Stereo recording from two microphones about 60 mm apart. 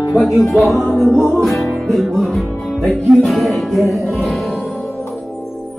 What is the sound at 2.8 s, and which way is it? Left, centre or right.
Music, centre.